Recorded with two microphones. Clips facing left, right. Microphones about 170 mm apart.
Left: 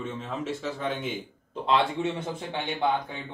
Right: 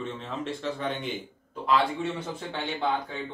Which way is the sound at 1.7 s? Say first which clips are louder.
Even; 25° left (ahead or behind).